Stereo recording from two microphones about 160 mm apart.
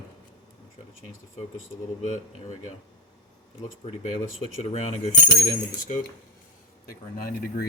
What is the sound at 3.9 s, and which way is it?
Coin, 40° left (ahead or behind).